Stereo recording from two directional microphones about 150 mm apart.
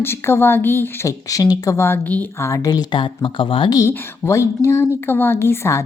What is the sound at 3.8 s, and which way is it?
A woman's voice, 15° left (ahead or behind).